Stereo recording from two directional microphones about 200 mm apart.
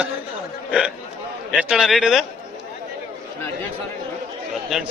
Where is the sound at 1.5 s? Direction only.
5° right (ahead or behind).